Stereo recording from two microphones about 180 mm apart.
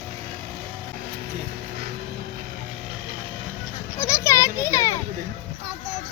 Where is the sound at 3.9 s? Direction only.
15° left (ahead or behind).